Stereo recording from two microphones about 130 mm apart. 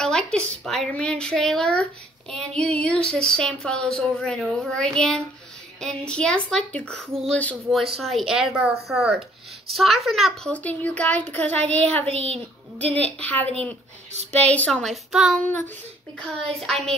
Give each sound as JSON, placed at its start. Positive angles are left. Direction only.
{"t": 0.0, "sound": "speech", "side_deg": 5}
{"t": 7.7, "sound": "speech", "side_deg": 0}
{"t": 10.5, "sound": "speech", "side_deg": 10}
{"t": 12.1, "sound": "a woman's voice", "side_deg": -55}
{"t": 12.7, "sound": "speech", "side_deg": 10}
{"t": 16.6, "sound": "speech", "side_deg": 5}